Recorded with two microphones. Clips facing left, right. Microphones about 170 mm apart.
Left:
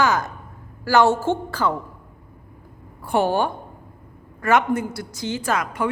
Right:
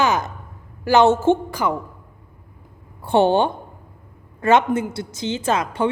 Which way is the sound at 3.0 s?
25° right (ahead or behind).